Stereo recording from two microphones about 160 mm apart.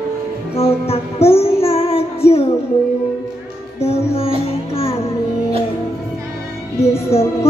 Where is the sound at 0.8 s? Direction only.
40° left (ahead or behind).